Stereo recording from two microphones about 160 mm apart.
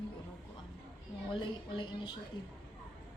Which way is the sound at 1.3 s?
30° left (ahead or behind).